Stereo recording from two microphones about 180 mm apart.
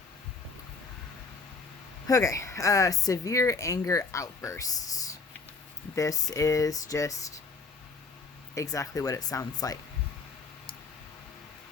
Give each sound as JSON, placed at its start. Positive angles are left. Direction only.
{"t": 2.0, "sound": "a woman's voice", "side_deg": 20}
{"t": 8.5, "sound": "speech", "side_deg": 20}